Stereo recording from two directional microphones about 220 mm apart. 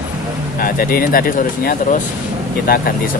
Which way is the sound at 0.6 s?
40° left (ahead or behind).